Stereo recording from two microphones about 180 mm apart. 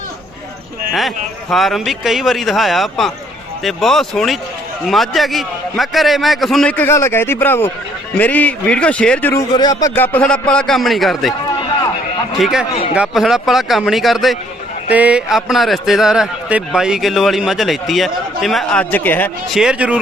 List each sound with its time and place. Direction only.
0.9 s a man's voice: centre (ahead or behind)
9.5 s speech: 20° left (ahead or behind)
9.9 s a man's voice: 10° left (ahead or behind)
12.4 s a man's voice: centre (ahead or behind)
19.5 s a man's voice: 5° right (ahead or behind)